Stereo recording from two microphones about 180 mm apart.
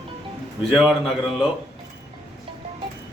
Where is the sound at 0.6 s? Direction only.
5° right (ahead or behind).